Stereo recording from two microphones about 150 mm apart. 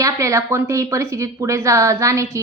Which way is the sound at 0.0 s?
20° right (ahead or behind).